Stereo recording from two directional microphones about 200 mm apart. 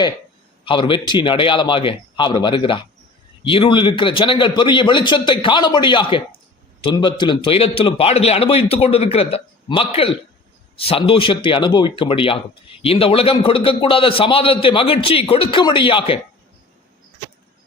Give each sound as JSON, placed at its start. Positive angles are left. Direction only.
{"t": 0.6, "sound": "a man's voice", "side_deg": 25}